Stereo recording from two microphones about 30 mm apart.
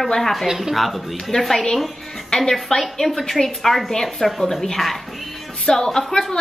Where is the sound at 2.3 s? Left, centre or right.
Left.